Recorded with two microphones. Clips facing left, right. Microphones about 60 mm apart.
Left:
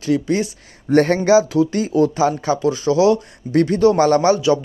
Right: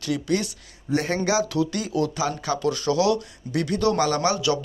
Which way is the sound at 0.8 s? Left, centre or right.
Left.